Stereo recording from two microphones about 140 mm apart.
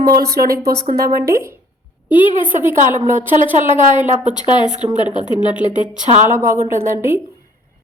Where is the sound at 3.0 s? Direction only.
65° right (ahead or behind).